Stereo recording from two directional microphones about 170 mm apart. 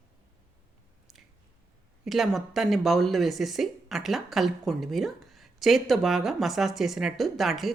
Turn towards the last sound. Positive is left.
turn(degrees=0)  # may be behind; listen again after turning